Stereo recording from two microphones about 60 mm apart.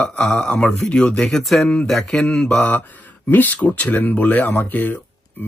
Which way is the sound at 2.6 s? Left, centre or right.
Left.